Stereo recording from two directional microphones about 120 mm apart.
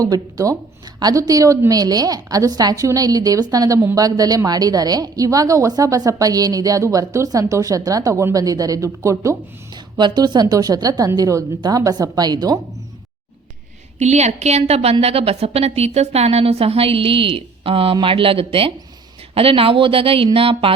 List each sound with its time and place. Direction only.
0.0 s a woman's voice: 30° right (ahead or behind)
10.0 s speech: 35° right (ahead or behind)
14.0 s a woman's voice: 70° right (ahead or behind); by 20.7 s 50° right (ahead or behind)